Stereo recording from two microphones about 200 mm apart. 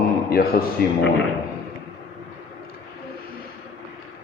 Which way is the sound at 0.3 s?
50° left (ahead or behind).